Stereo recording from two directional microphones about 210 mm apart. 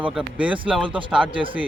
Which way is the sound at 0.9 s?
25° right (ahead or behind).